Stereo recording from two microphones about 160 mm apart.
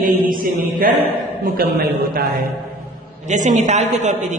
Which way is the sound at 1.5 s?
70° right (ahead or behind).